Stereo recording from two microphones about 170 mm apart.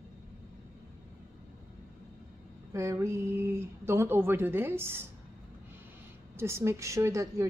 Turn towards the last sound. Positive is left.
turn(degrees=-15)  # may be behind; listen again after turning